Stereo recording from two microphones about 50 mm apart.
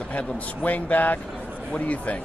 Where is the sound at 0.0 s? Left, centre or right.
Left.